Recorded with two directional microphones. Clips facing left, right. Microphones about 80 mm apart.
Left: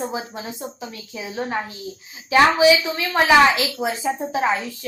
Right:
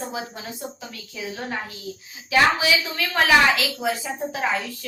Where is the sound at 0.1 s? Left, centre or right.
Left.